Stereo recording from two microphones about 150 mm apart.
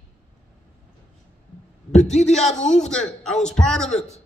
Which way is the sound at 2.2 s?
50° left (ahead or behind).